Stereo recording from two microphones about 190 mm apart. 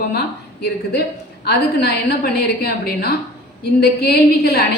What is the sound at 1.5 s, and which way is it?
A woman's voice, 55° left (ahead or behind).